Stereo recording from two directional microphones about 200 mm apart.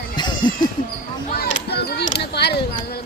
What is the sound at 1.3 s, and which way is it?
Speech, 50° left (ahead or behind).